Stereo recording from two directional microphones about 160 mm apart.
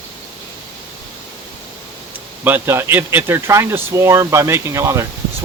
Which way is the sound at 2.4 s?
15° right (ahead or behind).